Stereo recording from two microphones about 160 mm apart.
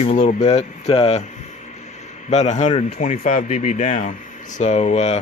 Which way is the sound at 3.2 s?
55° left (ahead or behind).